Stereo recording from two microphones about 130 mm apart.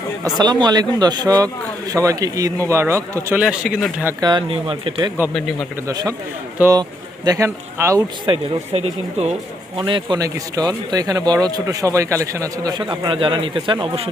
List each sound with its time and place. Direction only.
0.3 s speech: 35° right (ahead or behind)
3.3 s a man's voice: 5° right (ahead or behind)
4.2 s speech: 35° right (ahead or behind)
5.3 s a man's voice: centre (ahead or behind)
5.9 s speech: 30° right (ahead or behind)
7.3 s speech: 20° right (ahead or behind)
8.3 s speech: 50° right (ahead or behind)
9.7 s speech: 40° right (ahead or behind)
12.9 s speech: 40° right (ahead or behind)